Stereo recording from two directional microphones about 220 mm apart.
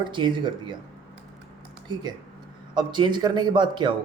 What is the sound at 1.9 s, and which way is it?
A man's voice, 20° right (ahead or behind).